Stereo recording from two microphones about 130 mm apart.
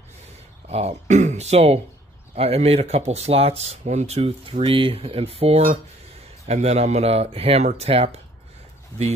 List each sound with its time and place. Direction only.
0.7 s speech: 55° right (ahead or behind)